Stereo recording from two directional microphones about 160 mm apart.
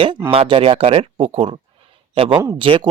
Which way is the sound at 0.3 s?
35° right (ahead or behind).